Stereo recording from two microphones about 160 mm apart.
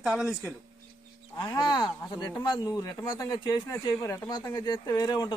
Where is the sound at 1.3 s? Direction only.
25° left (ahead or behind).